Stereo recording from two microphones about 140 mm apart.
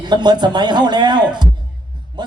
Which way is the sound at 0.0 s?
30° right (ahead or behind).